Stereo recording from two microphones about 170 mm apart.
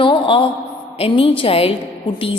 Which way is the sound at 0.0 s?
30° left (ahead or behind).